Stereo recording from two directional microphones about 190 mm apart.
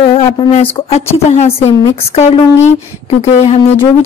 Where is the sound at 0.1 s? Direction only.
30° left (ahead or behind).